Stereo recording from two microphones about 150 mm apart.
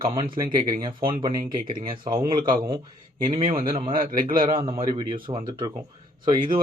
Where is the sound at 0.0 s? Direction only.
35° right (ahead or behind).